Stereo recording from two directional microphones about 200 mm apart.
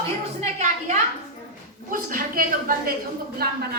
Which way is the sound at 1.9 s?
45° right (ahead or behind).